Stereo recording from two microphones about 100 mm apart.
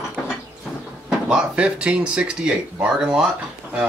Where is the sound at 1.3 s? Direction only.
10° right (ahead or behind).